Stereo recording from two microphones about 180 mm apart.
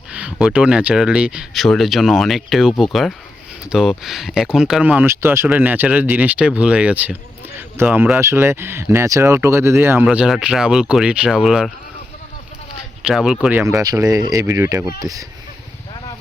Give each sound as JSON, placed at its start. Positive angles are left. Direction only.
{"t": 0.1, "sound": "speech", "side_deg": -5}
{"t": 13.1, "sound": "speech", "side_deg": -5}